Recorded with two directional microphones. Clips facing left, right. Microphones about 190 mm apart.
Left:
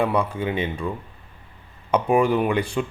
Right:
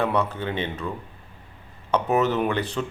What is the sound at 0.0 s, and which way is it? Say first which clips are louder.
Speech: left 2 dB; 10° left (ahead or behind).